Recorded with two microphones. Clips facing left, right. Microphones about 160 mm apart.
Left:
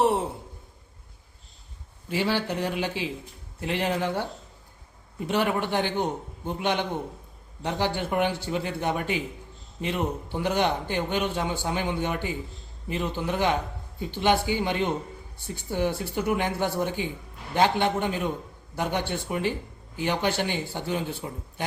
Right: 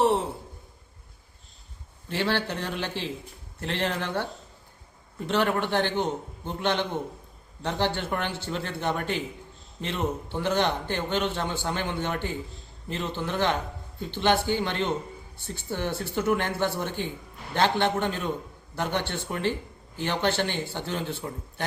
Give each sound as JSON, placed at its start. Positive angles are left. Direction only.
{"t": 2.0, "sound": "a man's voice", "side_deg": 10}